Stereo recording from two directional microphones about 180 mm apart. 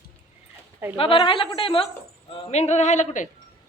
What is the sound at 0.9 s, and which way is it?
A man's voice, 30° left (ahead or behind).